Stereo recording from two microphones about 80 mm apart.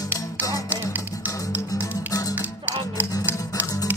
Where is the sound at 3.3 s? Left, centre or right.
Right.